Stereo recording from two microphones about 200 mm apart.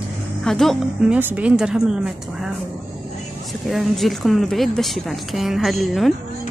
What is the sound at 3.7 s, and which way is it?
A woman's voice, centre (ahead or behind).